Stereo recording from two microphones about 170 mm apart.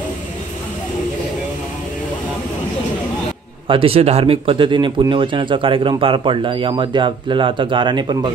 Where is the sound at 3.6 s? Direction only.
30° right (ahead or behind).